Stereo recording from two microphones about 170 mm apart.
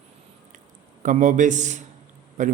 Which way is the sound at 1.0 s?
45° right (ahead or behind).